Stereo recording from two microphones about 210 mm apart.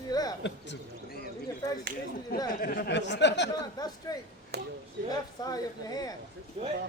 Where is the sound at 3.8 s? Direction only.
20° left (ahead or behind).